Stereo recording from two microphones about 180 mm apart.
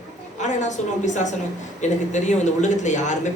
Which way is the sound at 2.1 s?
40° left (ahead or behind).